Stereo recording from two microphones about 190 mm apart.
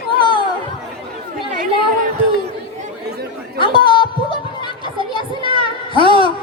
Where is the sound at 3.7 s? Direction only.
25° left (ahead or behind).